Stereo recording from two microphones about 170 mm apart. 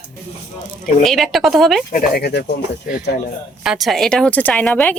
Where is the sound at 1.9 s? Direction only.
65° left (ahead or behind).